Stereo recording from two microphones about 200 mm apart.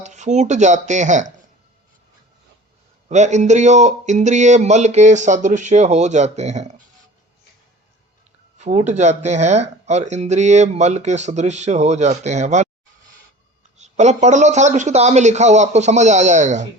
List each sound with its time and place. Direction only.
0.0 s speech: 35° right (ahead or behind)
3.1 s speech: 35° right (ahead or behind)
8.5 s speech: 35° right (ahead or behind)
13.7 s speech: 35° right (ahead or behind)